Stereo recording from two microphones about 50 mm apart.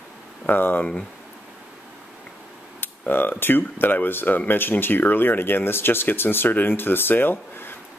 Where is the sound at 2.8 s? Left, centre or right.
Left.